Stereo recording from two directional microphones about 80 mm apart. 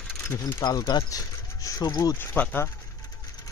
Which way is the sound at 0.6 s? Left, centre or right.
Left.